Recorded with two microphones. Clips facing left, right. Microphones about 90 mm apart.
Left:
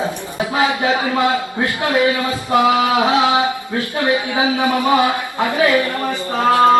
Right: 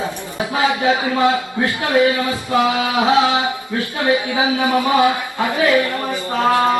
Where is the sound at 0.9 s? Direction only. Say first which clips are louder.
Right 1 dB; 20° right (ahead or behind).